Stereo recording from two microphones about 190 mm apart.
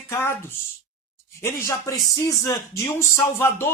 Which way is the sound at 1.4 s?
15° left (ahead or behind).